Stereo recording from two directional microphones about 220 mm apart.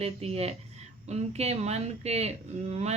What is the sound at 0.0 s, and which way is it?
A woman's voice, 30° right (ahead or behind).